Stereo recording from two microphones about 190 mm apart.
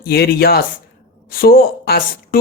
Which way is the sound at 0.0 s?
55° left (ahead or behind).